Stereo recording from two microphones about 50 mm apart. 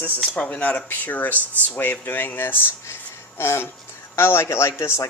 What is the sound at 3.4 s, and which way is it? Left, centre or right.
Speech, left.